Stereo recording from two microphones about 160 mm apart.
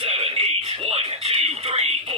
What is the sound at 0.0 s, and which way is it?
Music, 35° right (ahead or behind).